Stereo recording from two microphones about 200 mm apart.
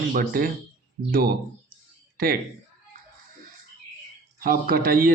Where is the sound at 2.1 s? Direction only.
45° right (ahead or behind).